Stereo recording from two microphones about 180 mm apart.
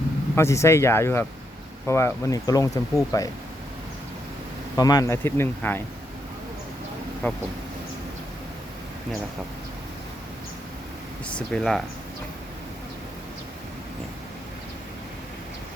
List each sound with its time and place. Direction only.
0.3 s speech: 15° left (ahead or behind)
4.8 s speech: 20° left (ahead or behind)
7.2 s speech: 10° left (ahead or behind)
11.3 s speech: 5° left (ahead or behind)